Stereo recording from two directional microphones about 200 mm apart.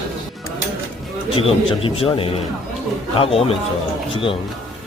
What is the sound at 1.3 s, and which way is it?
A man's voice, 25° left (ahead or behind).